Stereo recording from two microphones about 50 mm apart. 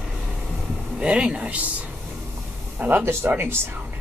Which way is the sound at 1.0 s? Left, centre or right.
Centre.